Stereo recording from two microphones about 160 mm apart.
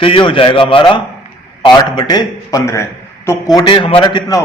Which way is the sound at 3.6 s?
30° left (ahead or behind).